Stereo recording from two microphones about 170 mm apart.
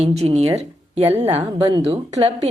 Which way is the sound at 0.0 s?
40° right (ahead or behind).